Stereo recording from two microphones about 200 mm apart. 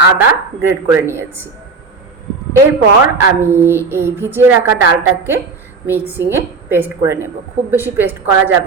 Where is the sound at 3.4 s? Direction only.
10° right (ahead or behind).